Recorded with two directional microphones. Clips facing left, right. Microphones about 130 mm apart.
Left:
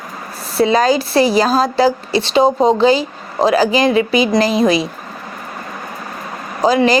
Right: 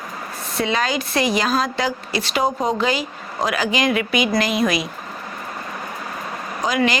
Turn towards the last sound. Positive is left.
turn(degrees=35)  # may be behind; listen again after turning